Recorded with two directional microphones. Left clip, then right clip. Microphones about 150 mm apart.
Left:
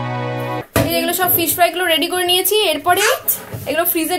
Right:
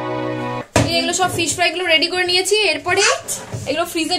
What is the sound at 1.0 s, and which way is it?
A woman's voice, 15° left (ahead or behind).